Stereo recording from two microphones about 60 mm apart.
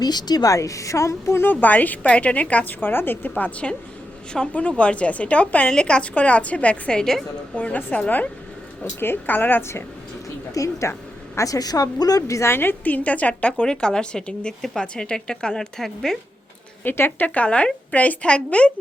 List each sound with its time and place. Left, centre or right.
0.0 s speech: left
1.4 s a woman's voice: left; by 7.3 s centre
7.5 s a woman's voice: left
8.8 s a woman's voice: left
10.5 s speech: left
11.3 s a woman's voice: left
12.4 s a woman's voice: left
12.8 s a woman's voice: left; by 16.1 s centre
16.8 s a woman's voice: left
17.2 s a woman's voice: left